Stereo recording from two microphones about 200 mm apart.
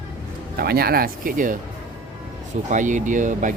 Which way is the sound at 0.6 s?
50° right (ahead or behind).